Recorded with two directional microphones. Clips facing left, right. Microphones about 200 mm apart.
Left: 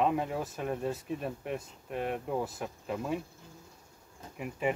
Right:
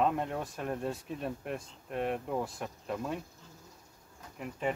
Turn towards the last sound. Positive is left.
turn(degrees=10)  # may be behind; listen again after turning